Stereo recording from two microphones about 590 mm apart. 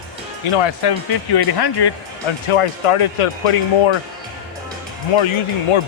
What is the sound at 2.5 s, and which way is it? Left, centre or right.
Speech, left.